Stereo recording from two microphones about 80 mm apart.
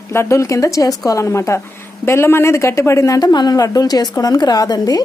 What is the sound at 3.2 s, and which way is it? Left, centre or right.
A woman's voice, left.